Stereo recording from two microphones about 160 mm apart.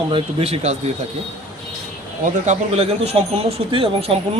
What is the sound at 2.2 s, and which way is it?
Speech, 45° right (ahead or behind).